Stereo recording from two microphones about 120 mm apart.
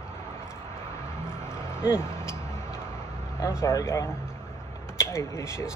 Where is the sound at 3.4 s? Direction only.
25° left (ahead or behind).